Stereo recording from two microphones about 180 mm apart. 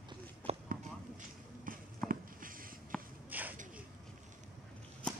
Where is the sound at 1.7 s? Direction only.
50° right (ahead or behind).